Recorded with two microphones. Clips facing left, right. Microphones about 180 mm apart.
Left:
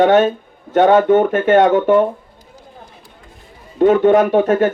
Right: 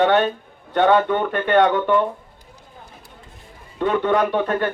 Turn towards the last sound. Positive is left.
turn(degrees=45)  # may be behind; listen again after turning